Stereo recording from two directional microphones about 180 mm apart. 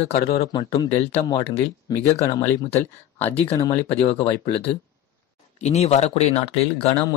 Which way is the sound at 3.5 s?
35° left (ahead or behind).